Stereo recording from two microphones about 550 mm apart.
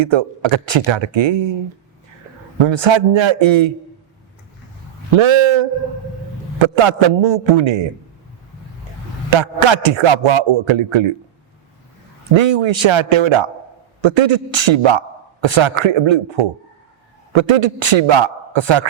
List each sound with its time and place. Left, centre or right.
0.0 s a man's voice: right
2.6 s a man's voice: right
5.1 s a man's voice: right
9.3 s a man's voice: right
12.3 s a man's voice: right